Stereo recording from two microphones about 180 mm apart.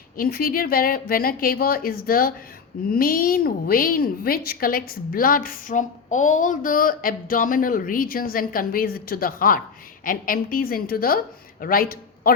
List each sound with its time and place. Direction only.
0.2 s a woman's voice: 55° left (ahead or behind)